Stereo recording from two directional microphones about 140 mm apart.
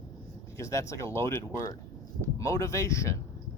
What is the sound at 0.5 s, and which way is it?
Speech, 20° left (ahead or behind).